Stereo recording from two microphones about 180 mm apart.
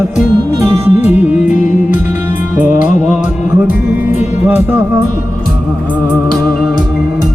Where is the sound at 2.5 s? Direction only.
10° right (ahead or behind).